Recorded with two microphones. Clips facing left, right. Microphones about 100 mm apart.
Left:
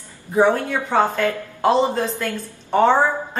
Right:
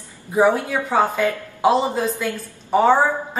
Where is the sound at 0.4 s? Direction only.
5° right (ahead or behind).